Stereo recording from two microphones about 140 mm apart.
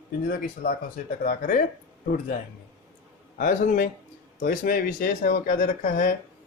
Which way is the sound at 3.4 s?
70° left (ahead or behind).